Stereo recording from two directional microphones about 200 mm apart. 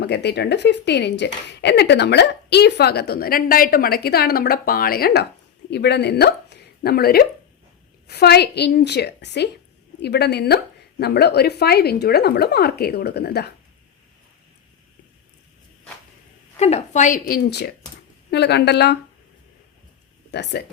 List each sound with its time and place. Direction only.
0.0 s speech: 55° left (ahead or behind)
16.6 s a woman's voice: 35° left (ahead or behind); by 18.9 s 55° left (ahead or behind)
20.3 s speech: 55° left (ahead or behind)